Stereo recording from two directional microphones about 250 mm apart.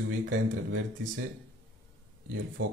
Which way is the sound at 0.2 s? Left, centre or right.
Right.